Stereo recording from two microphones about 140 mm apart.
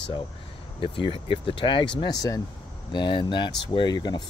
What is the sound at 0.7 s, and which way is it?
Speech, 35° left (ahead or behind).